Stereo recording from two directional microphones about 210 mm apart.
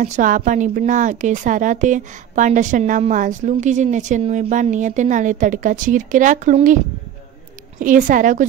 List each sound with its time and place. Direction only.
0.0 s a woman's voice: 35° right (ahead or behind)
7.8 s a woman's voice: 40° right (ahead or behind)